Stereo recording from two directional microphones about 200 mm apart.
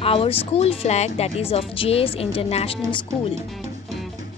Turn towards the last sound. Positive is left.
turn(degrees=25)  # may be behind; listen again after turning